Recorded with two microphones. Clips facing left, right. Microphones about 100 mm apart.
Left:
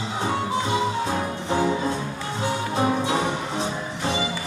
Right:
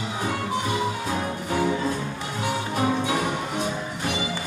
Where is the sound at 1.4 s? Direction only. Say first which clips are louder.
Left 2 dB; 25° left (ahead or behind).